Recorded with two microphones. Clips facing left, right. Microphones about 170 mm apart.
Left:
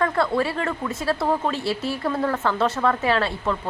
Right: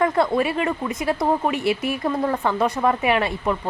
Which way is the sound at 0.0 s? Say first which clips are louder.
Right 2 dB; 20° right (ahead or behind).